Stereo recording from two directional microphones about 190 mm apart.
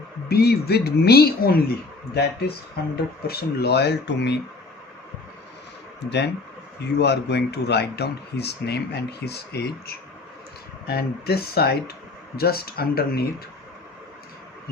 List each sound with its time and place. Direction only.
0.3 s speech: 55° left (ahead or behind)
6.1 s speech: 65° left (ahead or behind)